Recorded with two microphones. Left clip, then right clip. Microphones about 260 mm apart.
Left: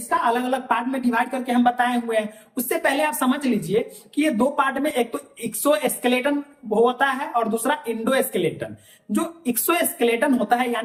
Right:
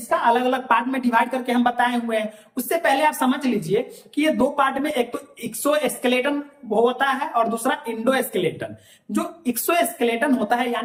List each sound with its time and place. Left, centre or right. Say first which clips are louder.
0.1 s a woman's voice: right 2 dB; centre